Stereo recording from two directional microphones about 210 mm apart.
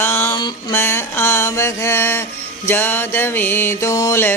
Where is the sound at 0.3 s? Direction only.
15° left (ahead or behind).